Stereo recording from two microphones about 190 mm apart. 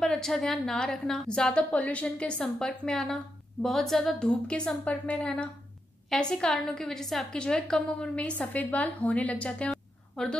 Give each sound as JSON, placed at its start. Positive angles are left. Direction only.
{"t": 0.0, "sound": "a woman's voice", "side_deg": 0}